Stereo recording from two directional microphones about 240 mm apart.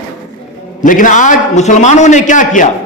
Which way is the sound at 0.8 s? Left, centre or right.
Left.